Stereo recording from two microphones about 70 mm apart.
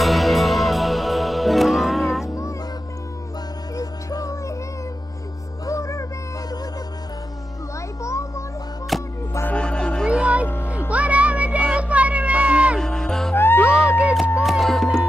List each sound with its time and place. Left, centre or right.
0.0 s music: centre
2.2 s music: left
3.7 s music: left
5.7 s music: left
8.0 s children playing: left
8.9 s music: centre
9.5 s music: centre
10.0 s music: centre
12.7 s music: centre
13.3 s music: left
14.4 s music: centre